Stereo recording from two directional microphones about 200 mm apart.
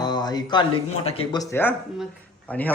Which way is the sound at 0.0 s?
20° left (ahead or behind).